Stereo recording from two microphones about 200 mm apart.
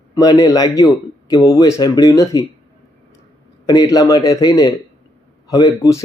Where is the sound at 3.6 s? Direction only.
20° left (ahead or behind).